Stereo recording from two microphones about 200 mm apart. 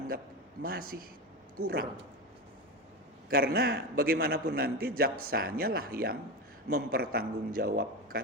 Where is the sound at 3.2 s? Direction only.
50° right (ahead or behind).